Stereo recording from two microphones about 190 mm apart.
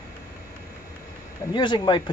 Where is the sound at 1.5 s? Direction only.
25° left (ahead or behind).